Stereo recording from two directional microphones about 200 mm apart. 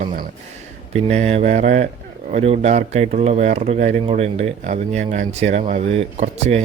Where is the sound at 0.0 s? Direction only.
40° right (ahead or behind).